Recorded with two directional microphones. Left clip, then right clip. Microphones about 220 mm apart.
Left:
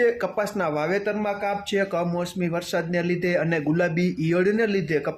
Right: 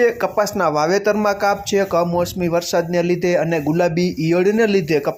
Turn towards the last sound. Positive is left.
turn(degrees=-20)  # may be behind; listen again after turning